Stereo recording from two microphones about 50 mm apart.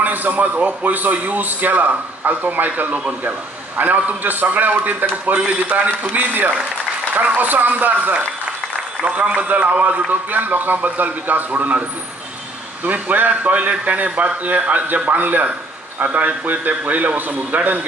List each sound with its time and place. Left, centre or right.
0.0 s a man's voice: right
5.9 s a man's voice: right
12.8 s a man's voice: right